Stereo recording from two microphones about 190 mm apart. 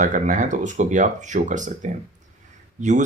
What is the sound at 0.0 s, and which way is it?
Speech, 40° right (ahead or behind).